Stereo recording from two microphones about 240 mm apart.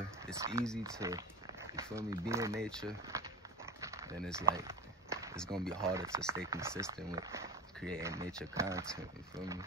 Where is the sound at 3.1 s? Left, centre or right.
Centre.